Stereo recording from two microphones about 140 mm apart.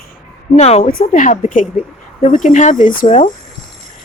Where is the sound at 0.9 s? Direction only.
80° left; by 3.3 s 65° left (ahead or behind).